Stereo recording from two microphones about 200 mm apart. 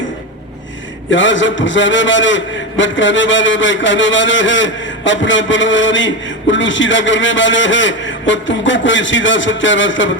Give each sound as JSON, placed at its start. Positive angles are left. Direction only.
{"t": 1.1, "sound": "a man's voice", "side_deg": 70}